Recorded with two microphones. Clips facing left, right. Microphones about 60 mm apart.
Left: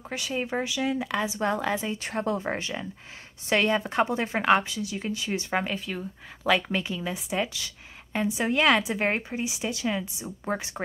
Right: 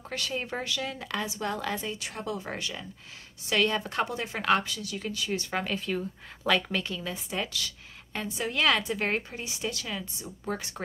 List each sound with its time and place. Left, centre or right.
0.1 s a woman's voice: centre
2.0 s a woman's voice: left
5.7 s a woman's voice: centre; by 10.8 s left